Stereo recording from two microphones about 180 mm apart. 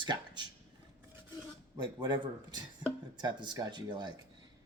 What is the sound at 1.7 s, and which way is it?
Speech, 20° right (ahead or behind).